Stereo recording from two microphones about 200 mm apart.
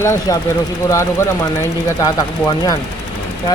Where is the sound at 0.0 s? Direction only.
15° left (ahead or behind).